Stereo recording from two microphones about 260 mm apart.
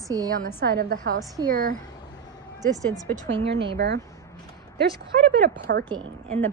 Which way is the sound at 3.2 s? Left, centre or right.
Right.